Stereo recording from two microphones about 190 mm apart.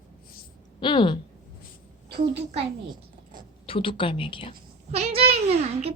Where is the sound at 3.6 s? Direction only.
30° left (ahead or behind).